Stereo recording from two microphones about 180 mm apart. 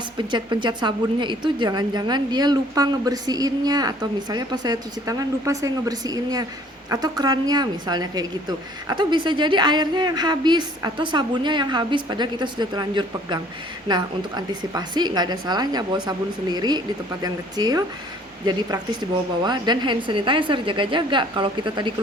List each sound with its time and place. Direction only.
0.2 s a woman's voice: 25° right (ahead or behind)